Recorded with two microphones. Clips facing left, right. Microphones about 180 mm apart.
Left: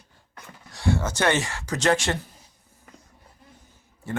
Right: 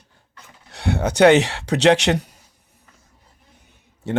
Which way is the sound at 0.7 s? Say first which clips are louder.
Right 3 dB; 65° right (ahead or behind).